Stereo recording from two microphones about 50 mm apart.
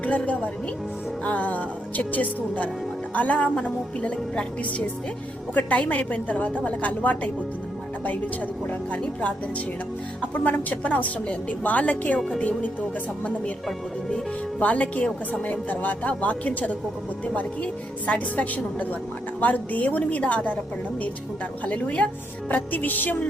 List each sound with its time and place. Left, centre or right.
0.0 s a woman's voice: left
5.5 s a woman's voice: left
10.2 s a woman's voice: left
14.6 s a woman's voice: left
21.6 s a woman's voice: left